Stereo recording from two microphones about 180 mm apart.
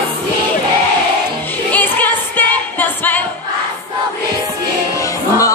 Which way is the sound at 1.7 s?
10° left (ahead or behind).